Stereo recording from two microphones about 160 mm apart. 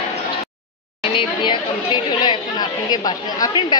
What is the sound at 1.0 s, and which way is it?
Speech, 30° left (ahead or behind).